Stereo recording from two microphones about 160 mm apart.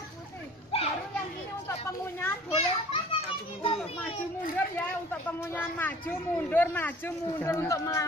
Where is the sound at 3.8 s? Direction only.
35° left (ahead or behind).